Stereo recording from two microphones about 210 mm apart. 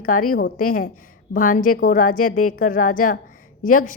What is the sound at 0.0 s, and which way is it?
Speech, 40° left (ahead or behind).